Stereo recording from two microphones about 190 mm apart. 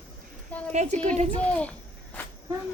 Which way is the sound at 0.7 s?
35° right (ahead or behind).